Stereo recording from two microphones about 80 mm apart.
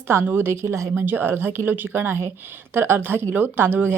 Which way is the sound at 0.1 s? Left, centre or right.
Right.